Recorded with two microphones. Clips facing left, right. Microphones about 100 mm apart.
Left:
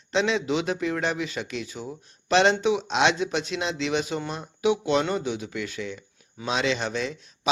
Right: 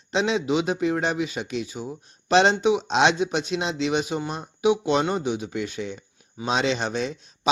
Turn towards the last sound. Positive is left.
turn(degrees=-20)  # may be behind; listen again after turning